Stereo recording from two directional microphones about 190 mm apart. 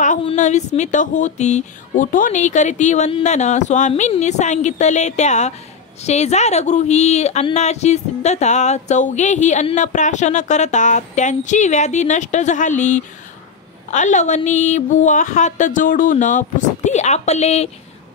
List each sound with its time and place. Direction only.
0.2 s speech: 35° left (ahead or behind)